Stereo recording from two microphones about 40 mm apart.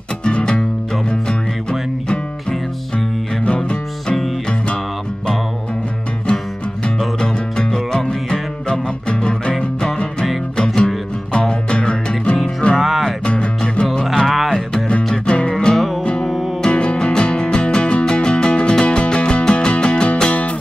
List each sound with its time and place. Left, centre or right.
0.2 s music: left
3.4 s music: left
7.2 s music: centre
12.7 s music: centre
13.2 s music: left
14.1 s music: centre
15.2 s music: left
16.6 s music: left